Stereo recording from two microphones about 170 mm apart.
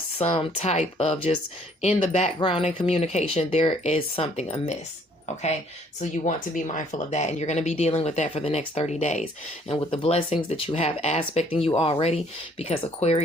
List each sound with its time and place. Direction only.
0.2 s speech: 40° left (ahead or behind)
6.0 s speech: 50° left (ahead or behind)
9.6 s speech: 30° left (ahead or behind)